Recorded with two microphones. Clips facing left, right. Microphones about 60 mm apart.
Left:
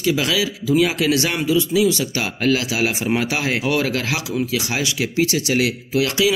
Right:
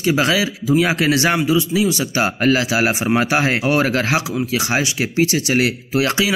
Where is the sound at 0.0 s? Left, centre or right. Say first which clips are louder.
Right 3 dB; right.